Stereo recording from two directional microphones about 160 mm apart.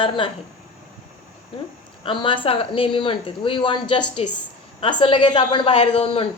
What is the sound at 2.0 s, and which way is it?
A woman's voice, 30° left (ahead or behind).